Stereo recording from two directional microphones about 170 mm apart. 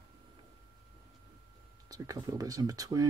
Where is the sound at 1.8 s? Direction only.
20° right (ahead or behind).